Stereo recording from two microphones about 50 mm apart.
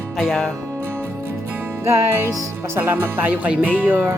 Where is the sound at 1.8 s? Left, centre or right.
Right.